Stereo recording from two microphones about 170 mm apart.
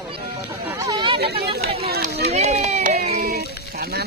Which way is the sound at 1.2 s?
70° right (ahead or behind).